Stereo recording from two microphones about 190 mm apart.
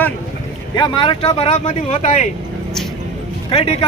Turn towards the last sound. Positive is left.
turn(degrees=30)  # may be behind; listen again after turning